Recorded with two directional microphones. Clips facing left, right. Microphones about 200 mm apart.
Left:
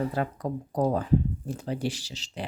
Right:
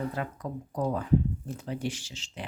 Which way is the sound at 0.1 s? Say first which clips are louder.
Left 5 dB; 35° left (ahead or behind).